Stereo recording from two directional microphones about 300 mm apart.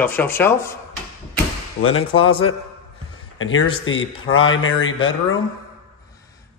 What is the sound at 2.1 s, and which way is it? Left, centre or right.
Speech, centre.